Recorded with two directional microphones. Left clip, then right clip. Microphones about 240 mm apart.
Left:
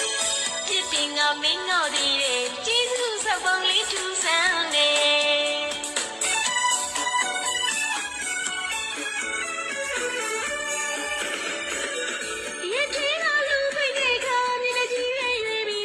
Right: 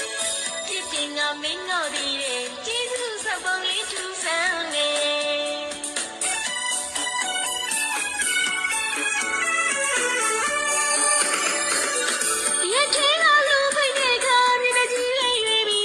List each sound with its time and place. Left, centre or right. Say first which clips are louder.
0.9 s music: left 1 dB; centre
3.2 s speech: left 2 dB; centre
4.3 s music: left 2 dB; centre
12.7 s music: right 5 dB; right